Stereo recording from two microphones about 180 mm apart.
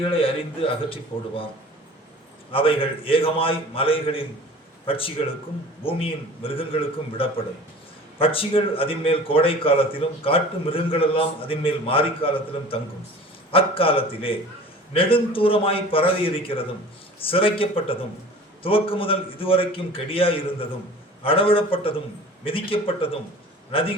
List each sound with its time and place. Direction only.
0.0 s a man's voice: 30° left (ahead or behind)
2.5 s a man's voice: 30° left (ahead or behind)